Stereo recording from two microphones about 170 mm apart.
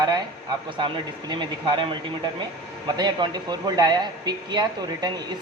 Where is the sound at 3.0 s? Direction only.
25° right (ahead or behind).